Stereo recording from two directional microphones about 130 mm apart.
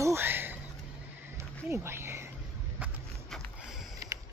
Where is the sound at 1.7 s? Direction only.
20° right (ahead or behind).